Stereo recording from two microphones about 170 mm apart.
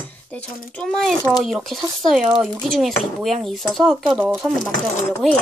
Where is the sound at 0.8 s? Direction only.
Centre (ahead or behind).